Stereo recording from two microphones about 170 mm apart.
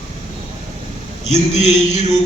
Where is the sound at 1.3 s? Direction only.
40° left (ahead or behind).